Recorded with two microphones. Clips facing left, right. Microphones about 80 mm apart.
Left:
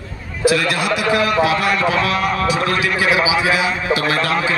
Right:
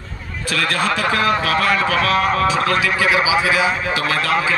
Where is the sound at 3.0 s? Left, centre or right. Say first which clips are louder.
Left 2 dB; centre.